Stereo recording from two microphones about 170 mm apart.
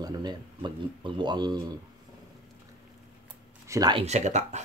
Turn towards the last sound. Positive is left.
turn(degrees=-45)  # may be behind; listen again after turning